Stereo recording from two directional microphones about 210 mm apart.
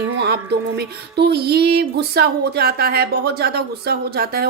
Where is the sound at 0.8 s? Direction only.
50° right (ahead or behind).